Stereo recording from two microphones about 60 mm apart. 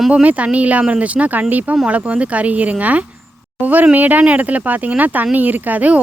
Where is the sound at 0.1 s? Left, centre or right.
Right.